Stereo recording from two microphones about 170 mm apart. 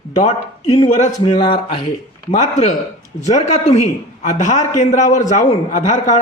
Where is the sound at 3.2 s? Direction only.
40° left (ahead or behind).